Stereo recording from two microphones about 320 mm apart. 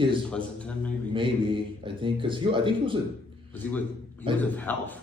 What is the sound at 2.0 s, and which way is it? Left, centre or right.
Speech, centre.